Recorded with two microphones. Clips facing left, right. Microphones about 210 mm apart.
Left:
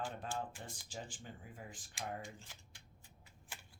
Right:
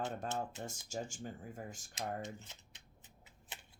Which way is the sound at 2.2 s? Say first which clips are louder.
Right 5 dB; 20° right (ahead or behind).